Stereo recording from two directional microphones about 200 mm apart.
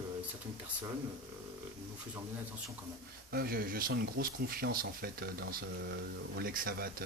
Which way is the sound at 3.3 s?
45° right (ahead or behind).